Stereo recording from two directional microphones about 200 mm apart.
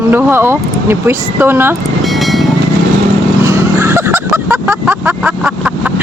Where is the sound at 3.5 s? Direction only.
10° right (ahead or behind).